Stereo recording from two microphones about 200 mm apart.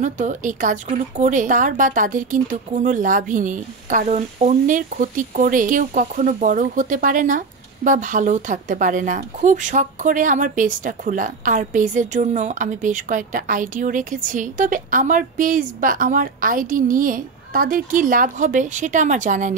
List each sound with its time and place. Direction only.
0.0 s speech: 40° right (ahead or behind)